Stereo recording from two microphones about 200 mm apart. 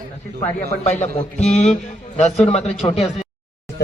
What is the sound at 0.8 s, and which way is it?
Speech, 35° left (ahead or behind).